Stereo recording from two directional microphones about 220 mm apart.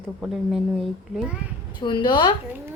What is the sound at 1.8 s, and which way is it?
Speech, 20° left (ahead or behind).